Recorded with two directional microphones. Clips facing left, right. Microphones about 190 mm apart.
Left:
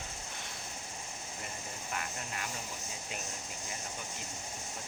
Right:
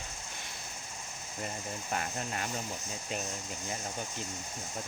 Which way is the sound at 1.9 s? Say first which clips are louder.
Right 5 dB; 35° right (ahead or behind).